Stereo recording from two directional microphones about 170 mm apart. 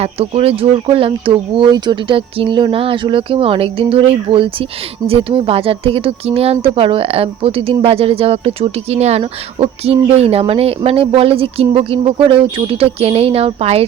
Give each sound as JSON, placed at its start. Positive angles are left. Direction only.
{"t": 0.0, "sound": "speech", "side_deg": -35}